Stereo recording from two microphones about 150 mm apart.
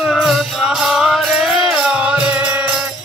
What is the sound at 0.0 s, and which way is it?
Music, 5° right (ahead or behind).